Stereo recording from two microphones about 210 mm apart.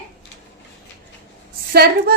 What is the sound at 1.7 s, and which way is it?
Speech, 50° right (ahead or behind).